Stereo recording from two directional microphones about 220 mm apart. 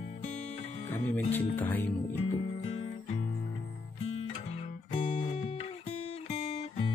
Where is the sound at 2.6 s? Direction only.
30° left (ahead or behind).